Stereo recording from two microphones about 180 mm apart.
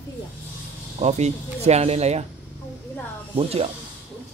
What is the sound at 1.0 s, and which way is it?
Speech, 35° right (ahead or behind).